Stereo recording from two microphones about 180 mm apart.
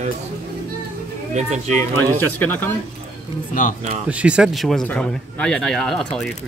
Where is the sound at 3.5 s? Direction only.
45° left (ahead or behind).